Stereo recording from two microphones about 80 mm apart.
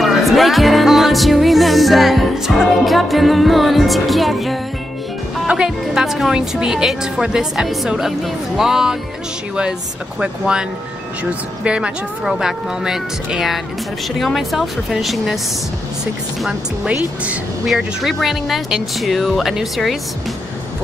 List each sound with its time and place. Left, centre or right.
0.0 s music: centre
10.2 s a woman's voice: centre
11.6 s a woman's voice: centre
14.1 s music: centre
16.8 s a woman's voice: centre
17.6 s music: centre